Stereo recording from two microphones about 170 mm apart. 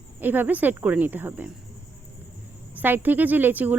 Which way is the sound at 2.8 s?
10° right (ahead or behind).